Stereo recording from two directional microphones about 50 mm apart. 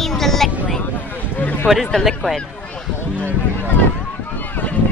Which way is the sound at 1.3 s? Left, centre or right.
Left.